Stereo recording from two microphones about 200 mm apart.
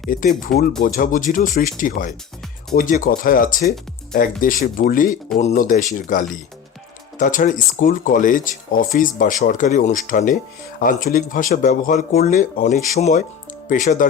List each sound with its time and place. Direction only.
0.1 s speech: 40° left (ahead or behind)